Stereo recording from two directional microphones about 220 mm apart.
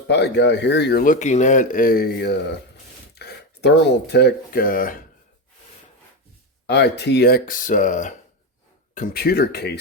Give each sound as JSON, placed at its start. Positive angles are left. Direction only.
{"t": 0.1, "sound": "speech", "side_deg": 50}
{"t": 6.7, "sound": "speech", "side_deg": 50}